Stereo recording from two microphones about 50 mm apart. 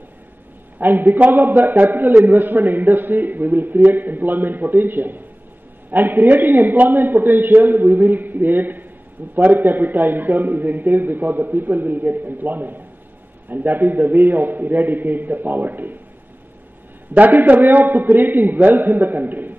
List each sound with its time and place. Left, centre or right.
0.7 s a man's voice: right
17.1 s a man's voice: right